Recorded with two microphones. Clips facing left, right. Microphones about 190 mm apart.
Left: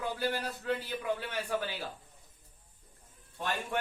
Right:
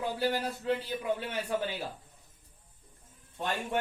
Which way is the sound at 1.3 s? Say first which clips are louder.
Right 2 dB; 25° right (ahead or behind).